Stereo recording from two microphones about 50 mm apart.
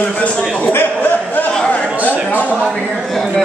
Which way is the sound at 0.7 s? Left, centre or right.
Left.